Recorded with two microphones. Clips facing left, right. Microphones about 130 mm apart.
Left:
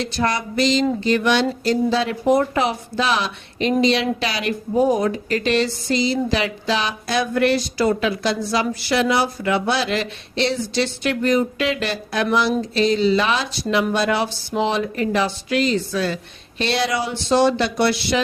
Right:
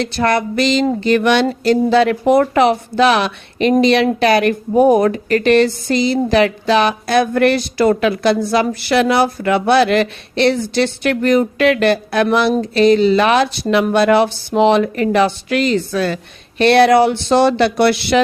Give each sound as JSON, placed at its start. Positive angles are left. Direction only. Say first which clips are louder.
{"t": 0.0, "sound": "a woman's voice", "louder": "right 6 dB", "side_deg": -65}